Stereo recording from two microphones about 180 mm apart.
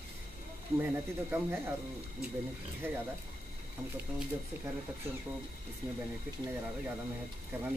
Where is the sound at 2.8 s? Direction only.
10° right (ahead or behind).